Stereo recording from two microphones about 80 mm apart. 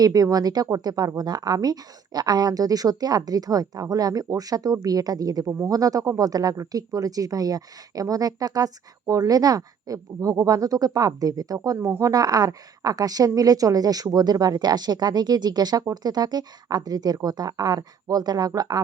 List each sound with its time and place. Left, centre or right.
0.0 s speech: right
11.8 s speech: right
12.1 s a woman's voice: right